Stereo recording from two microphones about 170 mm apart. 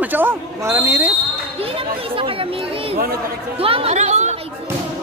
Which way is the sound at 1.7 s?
30° right (ahead or behind).